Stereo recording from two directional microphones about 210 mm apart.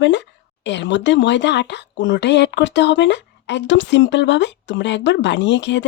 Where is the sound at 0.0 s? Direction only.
60° left (ahead or behind).